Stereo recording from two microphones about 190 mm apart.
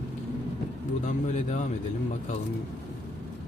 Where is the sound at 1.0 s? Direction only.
40° left (ahead or behind).